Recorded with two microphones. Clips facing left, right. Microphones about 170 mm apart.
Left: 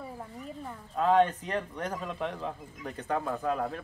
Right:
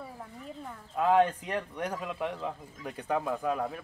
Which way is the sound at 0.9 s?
10° right (ahead or behind).